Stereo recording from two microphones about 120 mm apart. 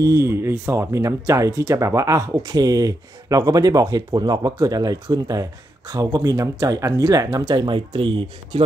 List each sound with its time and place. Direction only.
0.0 s speech: 25° right (ahead or behind); by 8.7 s 50° right (ahead or behind)